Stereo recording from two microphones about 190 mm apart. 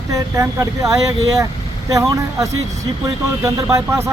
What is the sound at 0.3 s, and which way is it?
Speech, 15° right (ahead or behind).